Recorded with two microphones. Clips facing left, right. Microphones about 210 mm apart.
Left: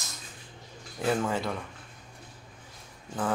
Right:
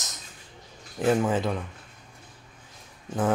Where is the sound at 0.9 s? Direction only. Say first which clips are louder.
Right 5 dB; 15° right (ahead or behind).